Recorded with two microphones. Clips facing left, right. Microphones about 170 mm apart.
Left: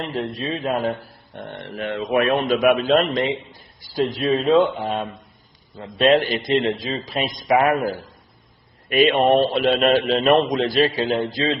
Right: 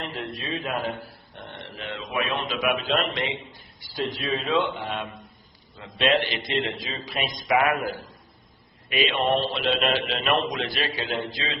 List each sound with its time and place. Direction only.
0.0 s a man's voice: 35° left (ahead or behind)
1.0 s speech: 50° left (ahead or behind)
4.2 s speech: centre (ahead or behind)
4.5 s a man's voice: 40° left (ahead or behind)
8.9 s a man's voice: 50° left (ahead or behind)